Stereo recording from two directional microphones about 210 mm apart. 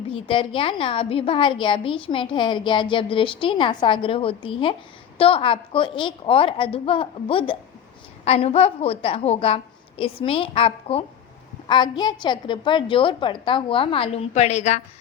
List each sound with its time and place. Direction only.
0.1 s a woman's voice: 25° left (ahead or behind)